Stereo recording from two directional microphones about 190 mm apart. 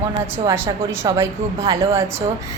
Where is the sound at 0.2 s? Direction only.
15° right (ahead or behind).